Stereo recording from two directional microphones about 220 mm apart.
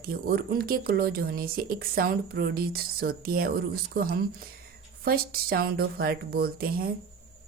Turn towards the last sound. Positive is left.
turn(degrees=-45)  # may be behind; listen again after turning